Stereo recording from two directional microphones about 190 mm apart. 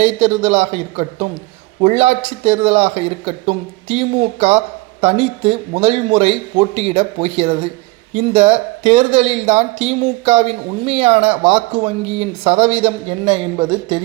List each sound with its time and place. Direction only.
0.0 s a man's voice: 35° right (ahead or behind)